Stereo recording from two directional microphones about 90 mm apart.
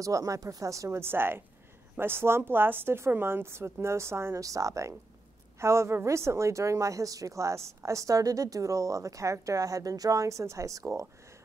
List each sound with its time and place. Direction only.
0.0 s a woman's voice: 40° right (ahead or behind)